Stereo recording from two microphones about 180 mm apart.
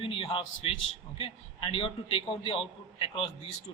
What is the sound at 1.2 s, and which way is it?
A man's voice, 30° left (ahead or behind).